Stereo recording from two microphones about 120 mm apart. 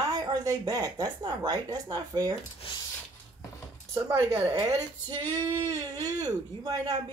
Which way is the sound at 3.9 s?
25° right (ahead or behind).